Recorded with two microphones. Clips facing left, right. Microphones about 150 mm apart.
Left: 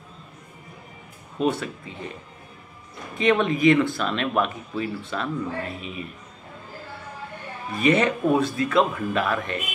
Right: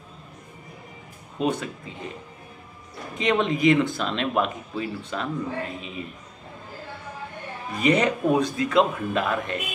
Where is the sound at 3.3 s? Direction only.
25° right (ahead or behind).